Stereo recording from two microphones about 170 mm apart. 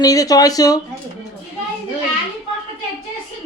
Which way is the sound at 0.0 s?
20° left (ahead or behind).